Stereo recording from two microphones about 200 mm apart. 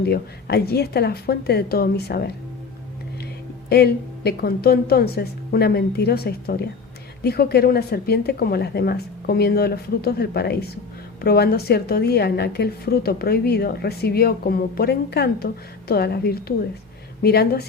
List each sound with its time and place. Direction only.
0.0 s a woman's voice: 55° left (ahead or behind)
3.7 s a woman's voice: 55° left (ahead or behind)